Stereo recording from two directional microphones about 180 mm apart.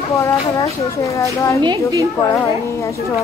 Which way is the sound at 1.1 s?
15° left (ahead or behind).